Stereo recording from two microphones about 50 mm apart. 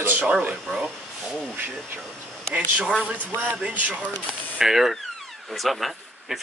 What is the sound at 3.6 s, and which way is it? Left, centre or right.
Speech, right.